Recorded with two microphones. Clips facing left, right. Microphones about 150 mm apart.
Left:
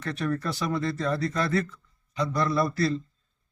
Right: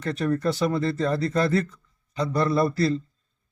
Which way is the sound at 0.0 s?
35° right (ahead or behind).